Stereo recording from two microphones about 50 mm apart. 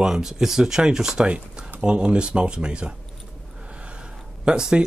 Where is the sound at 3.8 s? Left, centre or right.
Right.